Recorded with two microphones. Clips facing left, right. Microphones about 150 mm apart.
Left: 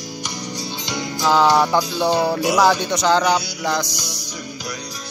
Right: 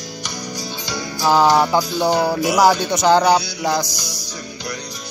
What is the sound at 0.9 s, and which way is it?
Music, 20° left (ahead or behind).